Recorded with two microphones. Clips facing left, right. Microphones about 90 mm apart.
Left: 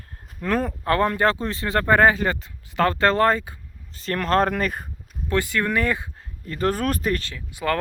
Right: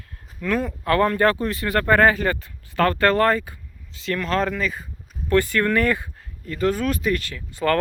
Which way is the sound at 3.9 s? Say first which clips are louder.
Left 2 dB; 45° left (ahead or behind).